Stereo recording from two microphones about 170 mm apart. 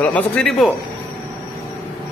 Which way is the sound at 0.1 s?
5° left (ahead or behind).